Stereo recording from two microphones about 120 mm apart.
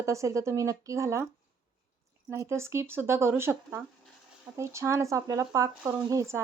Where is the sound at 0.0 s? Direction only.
25° right (ahead or behind).